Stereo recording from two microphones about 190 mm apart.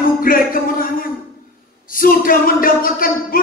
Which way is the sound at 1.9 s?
50° left (ahead or behind).